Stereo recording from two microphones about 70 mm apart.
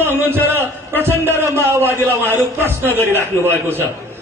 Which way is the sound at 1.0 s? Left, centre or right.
Right.